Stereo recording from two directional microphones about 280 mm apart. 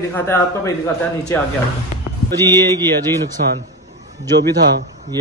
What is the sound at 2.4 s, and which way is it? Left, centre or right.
Speech, centre.